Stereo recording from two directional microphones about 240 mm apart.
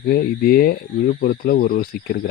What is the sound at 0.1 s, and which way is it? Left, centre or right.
Speech, left.